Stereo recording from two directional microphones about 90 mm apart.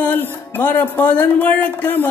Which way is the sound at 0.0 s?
20° left (ahead or behind).